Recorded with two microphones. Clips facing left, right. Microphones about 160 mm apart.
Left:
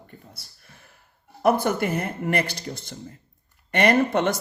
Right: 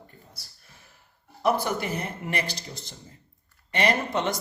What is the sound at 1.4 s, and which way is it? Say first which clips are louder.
A man's voice: left 4 dB; 55° left (ahead or behind).